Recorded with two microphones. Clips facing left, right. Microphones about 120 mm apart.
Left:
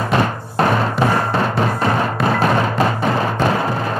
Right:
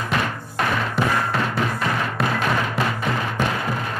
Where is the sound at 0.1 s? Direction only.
35° left (ahead or behind).